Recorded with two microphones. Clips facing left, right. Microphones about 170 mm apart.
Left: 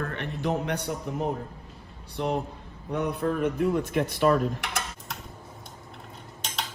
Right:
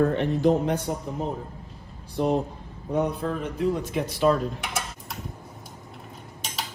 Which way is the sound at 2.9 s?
65° left (ahead or behind).